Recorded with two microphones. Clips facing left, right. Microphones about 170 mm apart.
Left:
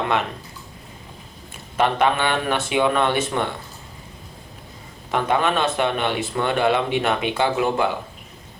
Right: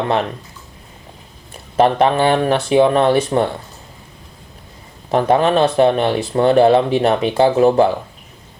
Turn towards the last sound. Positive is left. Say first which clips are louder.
# right 9 dB
turn(degrees=-35)  # may be behind; listen again after turning